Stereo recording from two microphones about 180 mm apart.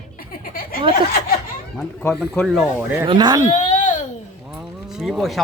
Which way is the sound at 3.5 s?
45° left (ahead or behind).